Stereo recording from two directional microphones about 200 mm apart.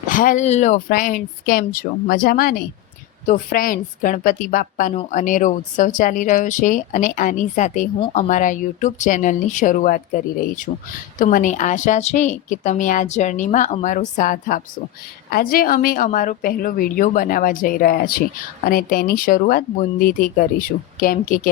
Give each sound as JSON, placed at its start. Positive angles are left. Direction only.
{"t": 0.1, "sound": "a woman's voice", "side_deg": 40}